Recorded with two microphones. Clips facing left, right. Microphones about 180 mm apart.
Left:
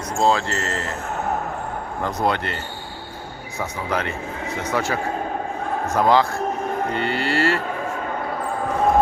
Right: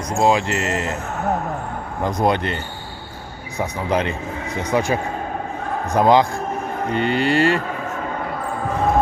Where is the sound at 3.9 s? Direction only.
20° right (ahead or behind).